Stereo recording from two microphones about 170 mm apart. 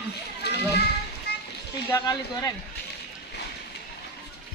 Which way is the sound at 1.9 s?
20° left (ahead or behind).